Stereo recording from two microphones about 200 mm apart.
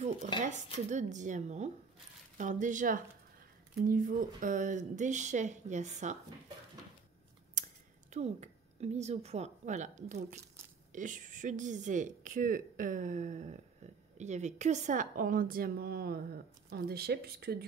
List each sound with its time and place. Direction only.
0.8 s speech: 35° right (ahead or behind)
7.6 s a sound: 40° right (ahead or behind)
8.1 s a woman's voice: 35° right (ahead or behind); by 17.6 s 50° right (ahead or behind)